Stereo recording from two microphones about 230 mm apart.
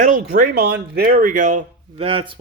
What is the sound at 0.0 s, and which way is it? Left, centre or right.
A man's voice, right.